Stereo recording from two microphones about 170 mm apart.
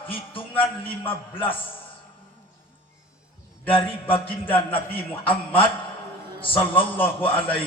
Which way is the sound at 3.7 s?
30° left (ahead or behind).